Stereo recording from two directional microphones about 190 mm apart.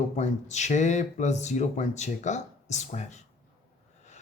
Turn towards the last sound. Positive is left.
turn(degrees=40)  # may be behind; listen again after turning